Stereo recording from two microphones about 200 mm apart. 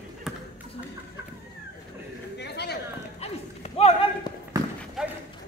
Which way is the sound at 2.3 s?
55° left (ahead or behind).